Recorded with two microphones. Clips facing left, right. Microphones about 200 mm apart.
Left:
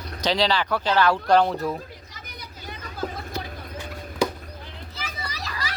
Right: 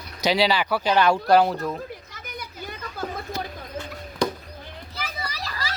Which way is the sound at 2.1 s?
50° right (ahead or behind).